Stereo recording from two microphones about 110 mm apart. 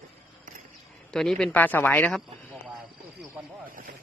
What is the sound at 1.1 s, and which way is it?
Speech, 5° left (ahead or behind).